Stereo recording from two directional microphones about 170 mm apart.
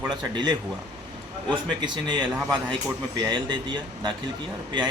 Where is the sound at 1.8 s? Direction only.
25° right (ahead or behind).